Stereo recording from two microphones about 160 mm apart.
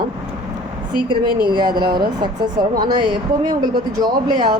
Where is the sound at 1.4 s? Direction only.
30° right (ahead or behind).